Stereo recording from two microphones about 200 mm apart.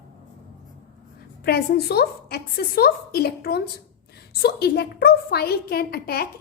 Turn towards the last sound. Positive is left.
turn(degrees=50)  # may be behind; listen again after turning